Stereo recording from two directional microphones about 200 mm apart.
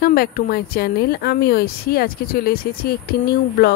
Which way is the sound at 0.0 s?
50° left (ahead or behind).